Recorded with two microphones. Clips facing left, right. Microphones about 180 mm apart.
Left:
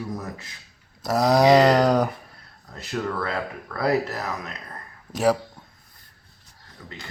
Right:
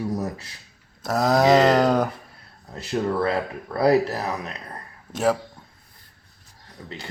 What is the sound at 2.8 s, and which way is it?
Speech, 30° right (ahead or behind).